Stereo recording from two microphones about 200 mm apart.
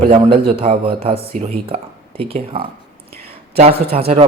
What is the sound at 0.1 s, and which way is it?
Speech, 25° right (ahead or behind).